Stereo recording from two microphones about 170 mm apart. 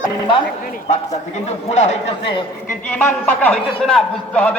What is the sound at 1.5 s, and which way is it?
Speech, 45° left (ahead or behind).